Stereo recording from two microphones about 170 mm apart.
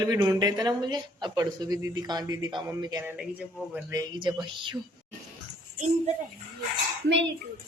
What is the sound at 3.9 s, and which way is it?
Speech, 25° right (ahead or behind).